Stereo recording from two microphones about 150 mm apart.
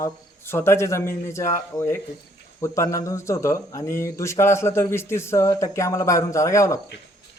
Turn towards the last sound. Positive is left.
turn(degrees=20)  # may be behind; listen again after turning